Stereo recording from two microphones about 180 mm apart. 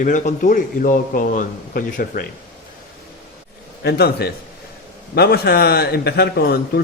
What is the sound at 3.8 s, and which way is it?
A man's voice, 60° left (ahead or behind).